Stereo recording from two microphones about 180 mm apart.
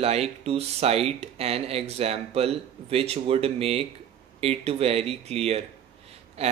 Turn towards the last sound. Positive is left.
turn(degrees=-35)  # may be behind; listen again after turning